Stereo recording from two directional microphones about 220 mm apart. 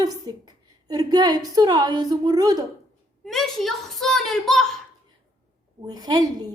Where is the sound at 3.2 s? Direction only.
Centre (ahead or behind).